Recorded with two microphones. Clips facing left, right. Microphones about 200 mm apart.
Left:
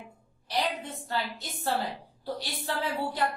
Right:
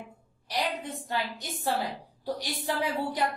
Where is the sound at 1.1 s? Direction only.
15° right (ahead or behind).